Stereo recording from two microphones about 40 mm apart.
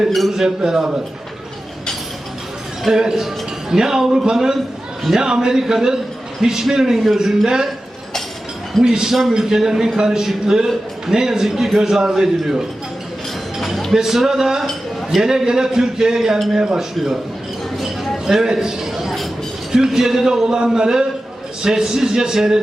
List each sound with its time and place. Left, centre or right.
0.1 s a man's voice: centre
0.4 s a man's voice: centre
2.9 s a man's voice: centre
8.8 s a man's voice: centre
13.6 s a sound: centre
13.9 s a man's voice: centre
18.3 s a man's voice: centre